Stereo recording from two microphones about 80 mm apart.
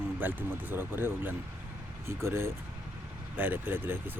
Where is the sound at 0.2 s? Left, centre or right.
Right.